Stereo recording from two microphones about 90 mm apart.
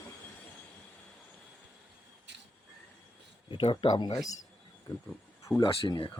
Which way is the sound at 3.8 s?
55° left (ahead or behind).